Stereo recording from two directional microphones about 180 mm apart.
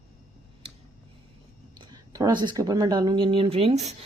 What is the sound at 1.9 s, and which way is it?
Speech, 20° right (ahead or behind).